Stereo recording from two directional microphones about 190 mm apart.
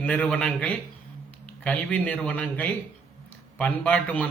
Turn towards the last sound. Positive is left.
turn(degrees=5)  # may be behind; listen again after turning